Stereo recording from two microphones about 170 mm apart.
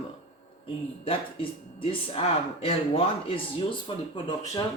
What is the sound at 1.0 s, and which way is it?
Speech, 35° left (ahead or behind).